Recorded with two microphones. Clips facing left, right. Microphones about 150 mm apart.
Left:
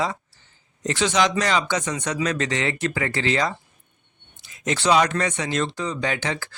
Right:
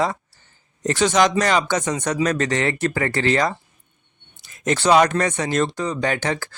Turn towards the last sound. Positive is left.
turn(degrees=-45)  # may be behind; listen again after turning